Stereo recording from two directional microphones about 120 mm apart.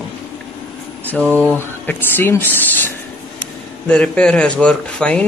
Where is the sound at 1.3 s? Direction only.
10° left (ahead or behind).